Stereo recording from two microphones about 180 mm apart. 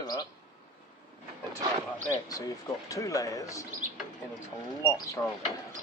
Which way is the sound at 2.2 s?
20° left (ahead or behind).